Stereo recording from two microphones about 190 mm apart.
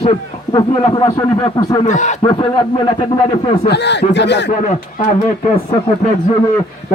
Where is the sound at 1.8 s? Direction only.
40° left (ahead or behind).